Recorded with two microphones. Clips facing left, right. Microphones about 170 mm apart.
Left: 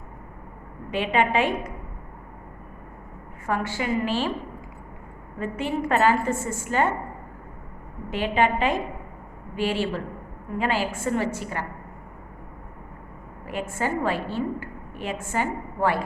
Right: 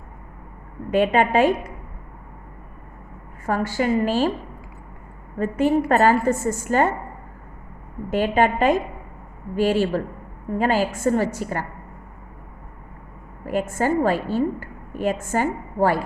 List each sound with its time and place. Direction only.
0.9 s a woman's voice: 45° right (ahead or behind)
3.4 s a woman's voice: 40° right (ahead or behind)
5.4 s a woman's voice: 45° right (ahead or behind)
8.1 s a woman's voice: 45° right (ahead or behind)
13.4 s a woman's voice: 40° right (ahead or behind)